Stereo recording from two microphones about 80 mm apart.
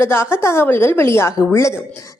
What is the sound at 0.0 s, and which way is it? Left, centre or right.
A woman's voice, left.